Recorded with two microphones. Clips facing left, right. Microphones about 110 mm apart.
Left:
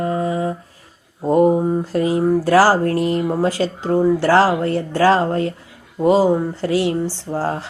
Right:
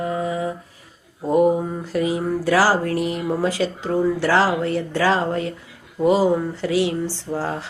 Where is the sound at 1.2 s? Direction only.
25° left (ahead or behind).